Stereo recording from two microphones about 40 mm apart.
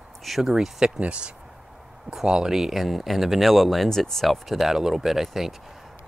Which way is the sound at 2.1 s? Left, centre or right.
Centre.